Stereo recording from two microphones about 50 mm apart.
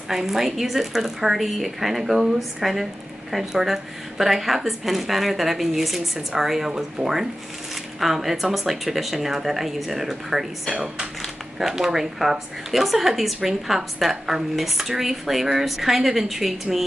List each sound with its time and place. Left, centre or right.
0.1 s a woman's voice: centre